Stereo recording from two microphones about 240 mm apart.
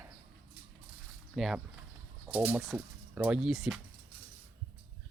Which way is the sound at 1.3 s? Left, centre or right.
Centre.